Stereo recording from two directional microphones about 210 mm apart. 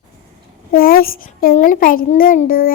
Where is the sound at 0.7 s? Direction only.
45° left (ahead or behind).